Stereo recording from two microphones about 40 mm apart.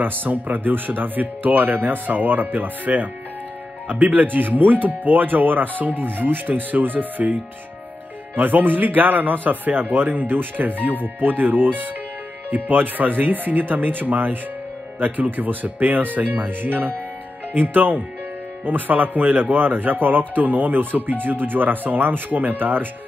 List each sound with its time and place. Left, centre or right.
0.0 s speech: right
8.4 s speech: right